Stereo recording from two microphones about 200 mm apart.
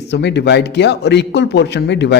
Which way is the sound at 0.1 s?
60° left (ahead or behind).